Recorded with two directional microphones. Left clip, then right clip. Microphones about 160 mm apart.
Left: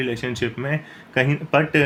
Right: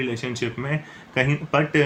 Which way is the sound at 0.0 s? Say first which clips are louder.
Left 2 dB; 40° left (ahead or behind).